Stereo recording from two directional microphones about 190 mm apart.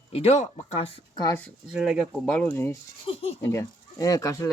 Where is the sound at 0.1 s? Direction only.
35° left (ahead or behind).